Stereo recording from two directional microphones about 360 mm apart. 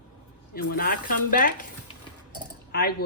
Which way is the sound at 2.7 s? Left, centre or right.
Left.